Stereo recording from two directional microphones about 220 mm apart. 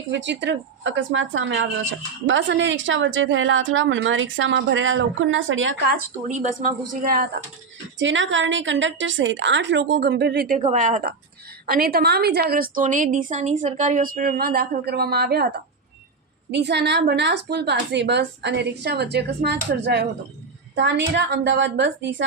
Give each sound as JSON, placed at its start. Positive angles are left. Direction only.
{"t": 0.1, "sound": "a woman's voice", "side_deg": -55}
{"t": 6.2, "sound": "a woman's voice", "side_deg": -35}
{"t": 7.9, "sound": "a woman's voice", "side_deg": -60}
{"t": 10.6, "sound": "a woman's voice", "side_deg": -35}